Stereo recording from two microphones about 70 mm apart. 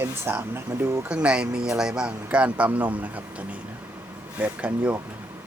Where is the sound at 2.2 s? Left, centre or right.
Right.